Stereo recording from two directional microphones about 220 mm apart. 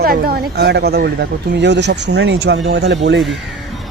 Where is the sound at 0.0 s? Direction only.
45° right (ahead or behind).